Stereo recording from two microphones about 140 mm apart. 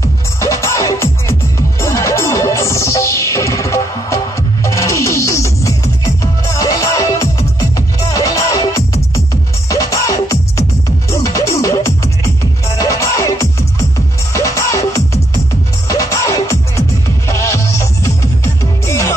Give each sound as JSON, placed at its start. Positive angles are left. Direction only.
{"t": 0.4, "sound": "music", "side_deg": 20}